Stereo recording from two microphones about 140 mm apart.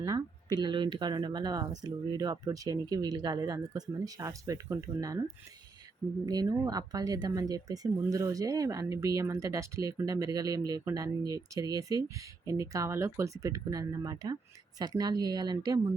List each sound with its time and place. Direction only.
0.0 s speech: 30° right (ahead or behind)
6.2 s speech: 25° right (ahead or behind)